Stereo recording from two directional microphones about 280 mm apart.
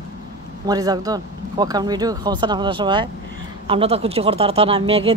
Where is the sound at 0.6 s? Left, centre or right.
Centre.